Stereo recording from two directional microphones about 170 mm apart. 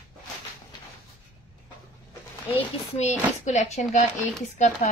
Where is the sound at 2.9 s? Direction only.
45° left (ahead or behind).